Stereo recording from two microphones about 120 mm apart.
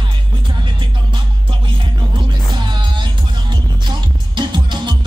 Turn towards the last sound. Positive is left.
turn(degrees=-40)  # may be behind; listen again after turning